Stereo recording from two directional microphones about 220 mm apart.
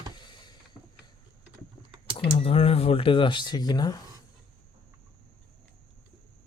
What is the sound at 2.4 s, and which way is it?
Speech, 25° left (ahead or behind).